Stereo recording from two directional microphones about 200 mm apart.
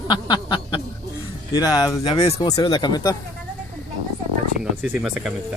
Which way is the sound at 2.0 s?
30° left (ahead or behind).